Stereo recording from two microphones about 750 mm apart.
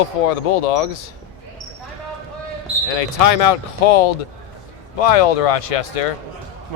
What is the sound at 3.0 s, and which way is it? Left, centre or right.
Speech, left.